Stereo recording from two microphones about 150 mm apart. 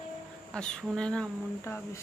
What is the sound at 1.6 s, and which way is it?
Speech, 20° left (ahead or behind).